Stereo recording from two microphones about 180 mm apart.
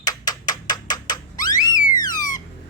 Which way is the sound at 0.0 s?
20° left (ahead or behind).